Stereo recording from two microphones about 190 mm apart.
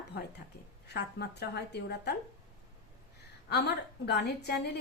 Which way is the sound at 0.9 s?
60° left (ahead or behind).